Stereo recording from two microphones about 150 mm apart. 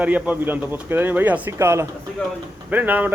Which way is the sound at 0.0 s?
10° right (ahead or behind).